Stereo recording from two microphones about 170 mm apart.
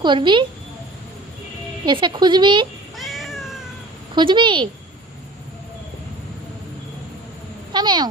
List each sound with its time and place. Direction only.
0.0 s speech: 30° right (ahead or behind)
1.8 s speech: 25° right (ahead or behind)
3.0 s cat: centre (ahead or behind)
4.1 s speech: 25° right (ahead or behind)
7.7 s speech: 25° right (ahead or behind)